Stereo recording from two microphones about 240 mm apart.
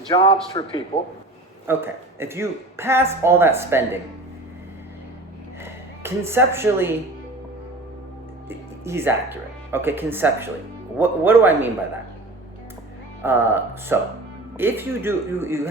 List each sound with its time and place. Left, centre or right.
0.1 s a man's voice: left
1.6 s speech: centre
5.6 s speech: centre
8.4 s speech: centre
13.2 s speech: centre